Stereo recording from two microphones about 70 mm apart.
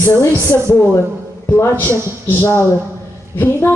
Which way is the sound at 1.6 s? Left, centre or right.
Left.